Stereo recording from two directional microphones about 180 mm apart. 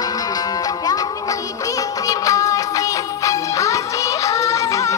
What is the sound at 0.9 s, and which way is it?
Music, 20° left (ahead or behind).